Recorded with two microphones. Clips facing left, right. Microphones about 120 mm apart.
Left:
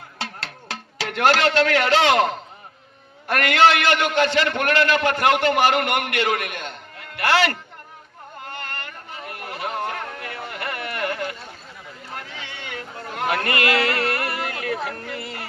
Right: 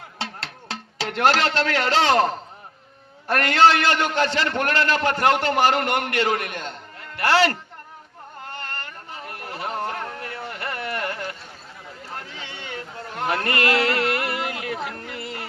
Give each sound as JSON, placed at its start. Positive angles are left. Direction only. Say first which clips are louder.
{"t": 0.2, "sound": "music", "louder": "even", "side_deg": -25}
{"t": 3.2, "sound": "a man's voice", "louder": "even", "side_deg": -30}
{"t": 8.5, "sound": "a sound", "louder": "left 1 dB", "side_deg": -35}